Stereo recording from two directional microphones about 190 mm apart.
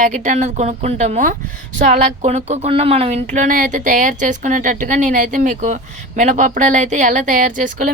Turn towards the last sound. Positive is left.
turn(degrees=-45)  # may be behind; listen again after turning